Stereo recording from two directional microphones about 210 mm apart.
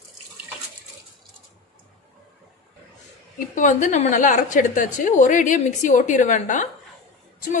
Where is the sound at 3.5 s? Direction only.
35° left (ahead or behind).